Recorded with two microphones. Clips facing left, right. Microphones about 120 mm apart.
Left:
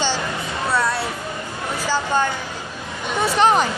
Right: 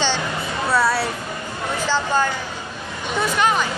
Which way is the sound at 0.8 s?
5° right (ahead or behind).